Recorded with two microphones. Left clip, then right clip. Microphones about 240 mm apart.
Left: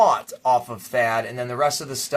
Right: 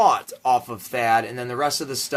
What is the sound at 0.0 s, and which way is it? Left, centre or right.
Speech, right.